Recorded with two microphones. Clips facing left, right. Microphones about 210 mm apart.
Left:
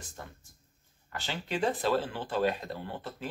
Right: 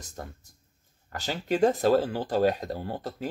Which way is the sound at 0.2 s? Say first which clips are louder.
Right 8 dB; 40° right (ahead or behind).